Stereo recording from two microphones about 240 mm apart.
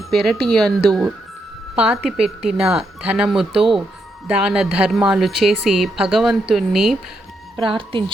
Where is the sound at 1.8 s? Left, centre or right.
Centre.